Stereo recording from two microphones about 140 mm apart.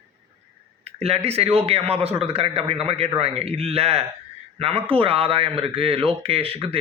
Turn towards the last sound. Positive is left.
turn(degrees=-40)  # may be behind; listen again after turning